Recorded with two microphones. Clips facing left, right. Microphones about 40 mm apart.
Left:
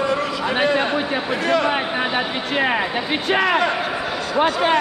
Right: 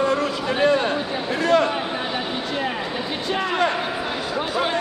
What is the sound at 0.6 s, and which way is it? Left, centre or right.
A man's voice, left.